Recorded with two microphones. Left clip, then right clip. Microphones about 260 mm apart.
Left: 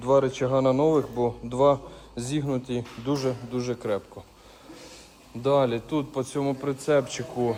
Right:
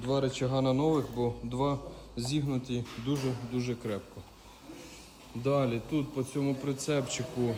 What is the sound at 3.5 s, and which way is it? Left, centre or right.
Speech, left.